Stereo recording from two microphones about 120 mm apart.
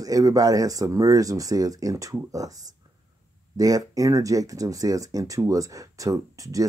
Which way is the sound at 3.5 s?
30° right (ahead or behind).